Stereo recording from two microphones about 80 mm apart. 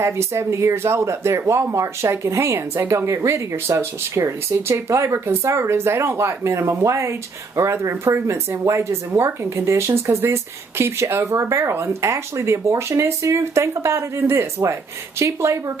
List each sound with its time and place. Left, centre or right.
0.0 s speech: right